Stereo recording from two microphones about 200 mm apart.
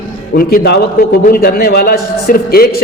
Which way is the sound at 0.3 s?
50° left (ahead or behind).